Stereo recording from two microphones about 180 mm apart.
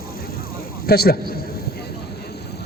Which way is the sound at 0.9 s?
60° left (ahead or behind).